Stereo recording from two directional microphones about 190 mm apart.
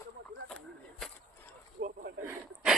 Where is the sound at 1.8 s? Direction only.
45° right (ahead or behind).